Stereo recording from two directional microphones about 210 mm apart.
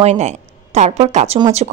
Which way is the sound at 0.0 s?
30° right (ahead or behind).